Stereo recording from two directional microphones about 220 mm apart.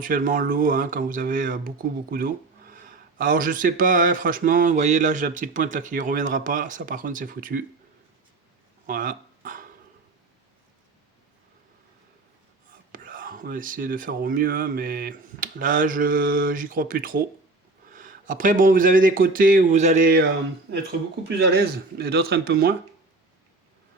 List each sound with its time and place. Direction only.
0.0 s speech: 40° right (ahead or behind)
8.9 s a sound: 40° right (ahead or behind)
12.9 s speech: 40° right (ahead or behind)
21.2 s speech: 45° right (ahead or behind)